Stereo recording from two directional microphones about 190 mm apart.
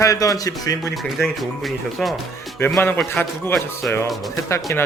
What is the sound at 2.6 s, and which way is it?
Speech, 10° left (ahead or behind).